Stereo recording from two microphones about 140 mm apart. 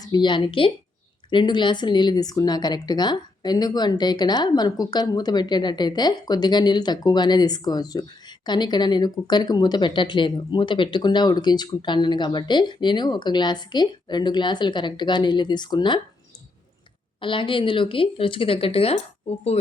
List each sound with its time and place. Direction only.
0.0 s speech: 30° left (ahead or behind)
17.2 s speech: 35° left (ahead or behind)